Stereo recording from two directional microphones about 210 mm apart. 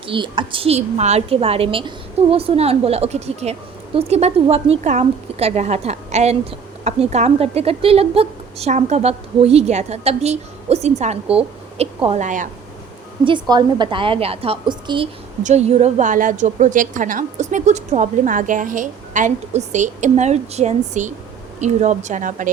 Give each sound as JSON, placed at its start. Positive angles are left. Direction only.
{"t": 0.1, "sound": "a woman's voice", "side_deg": -25}
{"t": 13.2, "sound": "a woman's voice", "side_deg": -20}